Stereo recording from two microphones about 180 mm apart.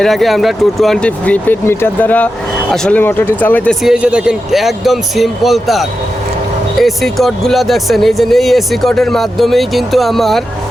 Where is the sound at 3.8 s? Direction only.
5° right (ahead or behind).